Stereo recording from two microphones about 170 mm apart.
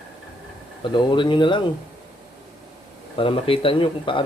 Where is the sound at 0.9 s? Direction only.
30° left (ahead or behind).